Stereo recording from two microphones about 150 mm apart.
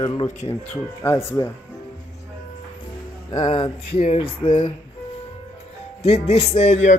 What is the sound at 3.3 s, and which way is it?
Speech, 30° left (ahead or behind).